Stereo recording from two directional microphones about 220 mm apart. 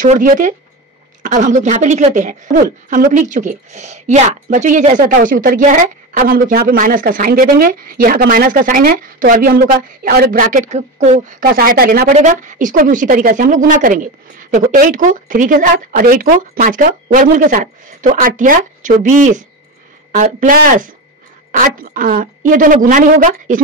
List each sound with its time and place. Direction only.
0.0 s a woman's voice: 35° right (ahead or behind)